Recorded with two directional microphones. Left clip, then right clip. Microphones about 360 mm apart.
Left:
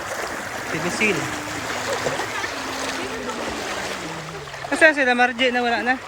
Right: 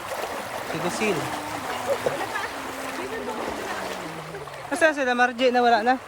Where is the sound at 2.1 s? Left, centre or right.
Right.